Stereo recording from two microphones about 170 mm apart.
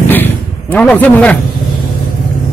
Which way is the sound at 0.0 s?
10° left (ahead or behind).